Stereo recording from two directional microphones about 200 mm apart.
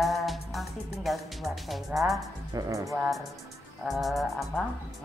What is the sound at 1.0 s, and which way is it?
A woman's voice, centre (ahead or behind).